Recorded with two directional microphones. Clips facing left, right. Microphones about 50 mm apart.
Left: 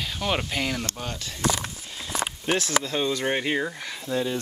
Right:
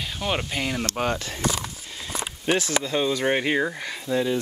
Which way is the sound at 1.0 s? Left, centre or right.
Right.